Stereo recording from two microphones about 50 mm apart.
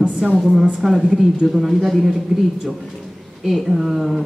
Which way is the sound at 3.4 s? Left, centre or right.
Centre.